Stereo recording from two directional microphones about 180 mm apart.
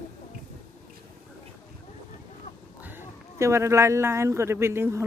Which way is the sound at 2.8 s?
10° right (ahead or behind).